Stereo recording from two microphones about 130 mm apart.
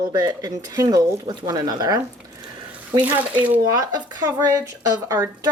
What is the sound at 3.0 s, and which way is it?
Speech, 10° right (ahead or behind).